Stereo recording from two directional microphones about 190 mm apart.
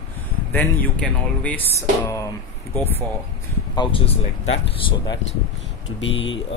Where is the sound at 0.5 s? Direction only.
5° left (ahead or behind).